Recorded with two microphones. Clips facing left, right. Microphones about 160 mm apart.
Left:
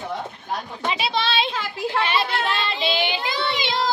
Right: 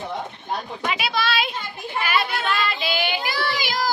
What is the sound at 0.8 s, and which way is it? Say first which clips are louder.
Children playing: left 1 dB; 30° left (ahead or behind).